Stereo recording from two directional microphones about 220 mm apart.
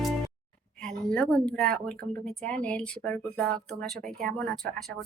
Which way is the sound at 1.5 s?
5° left (ahead or behind).